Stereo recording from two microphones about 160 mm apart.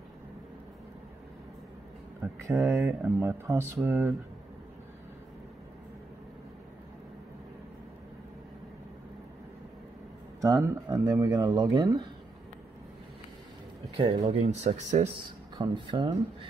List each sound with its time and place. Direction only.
2.4 s speech: 15° right (ahead or behind)
10.4 s speech: 20° right (ahead or behind)
13.9 s speech: 35° right (ahead or behind)
15.5 s speech: 30° right (ahead or behind)